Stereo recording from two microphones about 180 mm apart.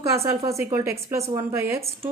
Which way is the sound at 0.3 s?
15° right (ahead or behind).